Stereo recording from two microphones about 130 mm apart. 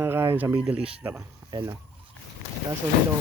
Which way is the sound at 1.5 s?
30° right (ahead or behind).